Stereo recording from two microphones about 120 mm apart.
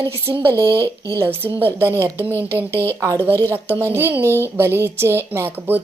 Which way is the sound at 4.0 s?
20° right (ahead or behind).